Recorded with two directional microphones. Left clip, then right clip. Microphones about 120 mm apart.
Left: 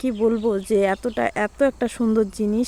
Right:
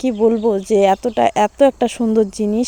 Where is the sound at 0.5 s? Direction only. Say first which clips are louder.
Right 6 dB; 20° right (ahead or behind).